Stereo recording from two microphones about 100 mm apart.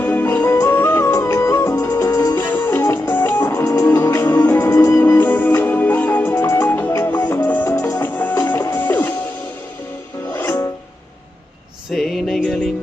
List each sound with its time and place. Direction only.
0.0 s music: 20° left (ahead or behind)
2.3 s music: 20° left (ahead or behind)
7.8 s music: 30° left (ahead or behind)
8.1 s music: 15° left (ahead or behind)
10.3 s music: 20° left (ahead or behind)
11.9 s a sound: centre (ahead or behind)